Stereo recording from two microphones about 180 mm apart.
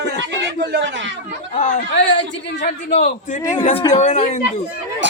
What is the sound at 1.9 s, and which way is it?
Speech, 80° left.